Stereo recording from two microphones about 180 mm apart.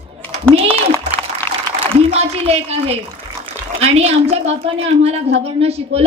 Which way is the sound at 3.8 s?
35° right (ahead or behind).